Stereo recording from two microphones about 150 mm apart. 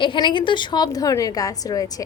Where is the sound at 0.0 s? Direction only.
35° left (ahead or behind).